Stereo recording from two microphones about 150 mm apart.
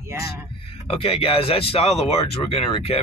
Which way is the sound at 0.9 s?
35° left (ahead or behind).